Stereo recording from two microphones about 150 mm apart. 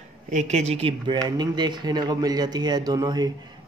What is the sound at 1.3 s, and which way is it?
Speech, 30° right (ahead or behind).